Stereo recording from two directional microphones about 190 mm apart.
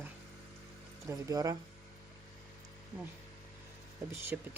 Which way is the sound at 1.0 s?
20° right (ahead or behind).